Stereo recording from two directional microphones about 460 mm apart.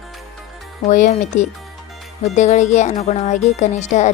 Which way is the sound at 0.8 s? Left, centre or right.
Centre.